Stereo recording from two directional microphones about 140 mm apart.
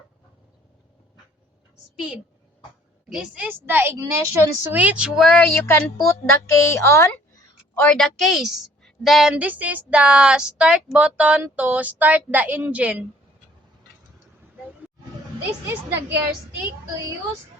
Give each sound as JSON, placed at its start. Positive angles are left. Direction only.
{"t": 3.1, "sound": "a woman's voice", "side_deg": -10}
{"t": 5.4, "sound": "a child's voice", "side_deg": 15}
{"t": 7.8, "sound": "a woman's voice", "side_deg": 5}
{"t": 15.6, "sound": "a woman's voice", "side_deg": -15}